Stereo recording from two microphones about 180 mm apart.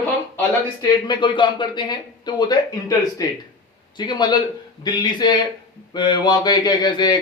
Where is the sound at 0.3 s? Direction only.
20° left (ahead or behind).